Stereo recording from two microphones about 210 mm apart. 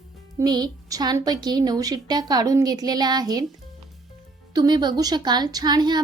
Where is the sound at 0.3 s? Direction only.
20° right (ahead or behind).